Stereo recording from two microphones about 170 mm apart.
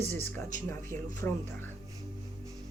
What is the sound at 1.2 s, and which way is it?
Speech, 15° left (ahead or behind).